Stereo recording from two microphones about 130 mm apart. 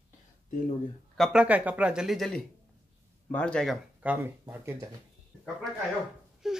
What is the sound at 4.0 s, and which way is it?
Speech, 15° right (ahead or behind).